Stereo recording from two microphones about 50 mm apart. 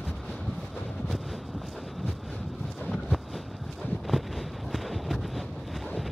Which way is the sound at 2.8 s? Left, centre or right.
Centre.